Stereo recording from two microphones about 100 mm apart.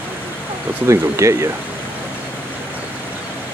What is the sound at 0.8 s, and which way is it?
Speech, 30° right (ahead or behind).